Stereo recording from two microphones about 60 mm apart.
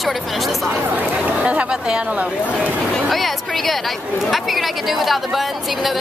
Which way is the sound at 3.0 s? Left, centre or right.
Centre.